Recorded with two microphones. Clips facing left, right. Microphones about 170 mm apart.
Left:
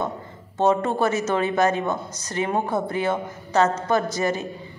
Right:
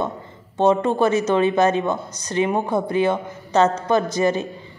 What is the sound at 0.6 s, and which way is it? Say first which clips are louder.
A man's voice: right 3 dB; 15° right (ahead or behind).